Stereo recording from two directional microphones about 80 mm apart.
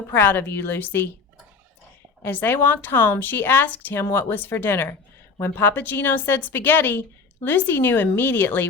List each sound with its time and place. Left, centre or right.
0.1 s a woman's voice: left
2.2 s a woman's voice: left